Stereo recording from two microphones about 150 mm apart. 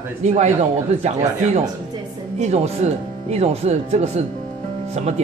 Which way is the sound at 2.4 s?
45° right (ahead or behind).